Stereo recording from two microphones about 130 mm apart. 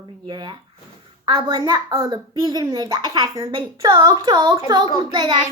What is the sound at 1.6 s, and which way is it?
A child's voice, 25° right (ahead or behind).